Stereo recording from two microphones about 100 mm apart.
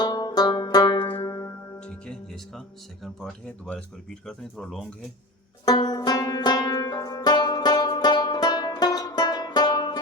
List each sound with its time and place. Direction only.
0.0 s music: 40° left (ahead or behind)
1.8 s speech: 10° left (ahead or behind)
5.8 s banjo: 45° left (ahead or behind)